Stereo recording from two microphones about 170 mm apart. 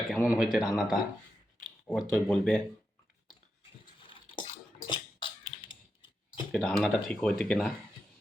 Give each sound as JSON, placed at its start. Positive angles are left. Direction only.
{"t": 0.1, "sound": "speech", "side_deg": -5}
{"t": 3.6, "sound": "a sound", "side_deg": 30}
{"t": 6.5, "sound": "speech", "side_deg": 0}